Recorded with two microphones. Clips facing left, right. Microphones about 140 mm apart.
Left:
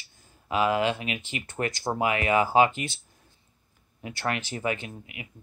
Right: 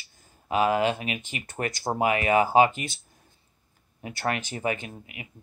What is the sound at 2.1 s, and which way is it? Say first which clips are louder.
Speech: right 2 dB; 20° right (ahead or behind).